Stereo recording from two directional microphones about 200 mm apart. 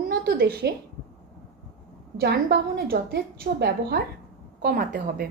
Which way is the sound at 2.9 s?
50° right (ahead or behind).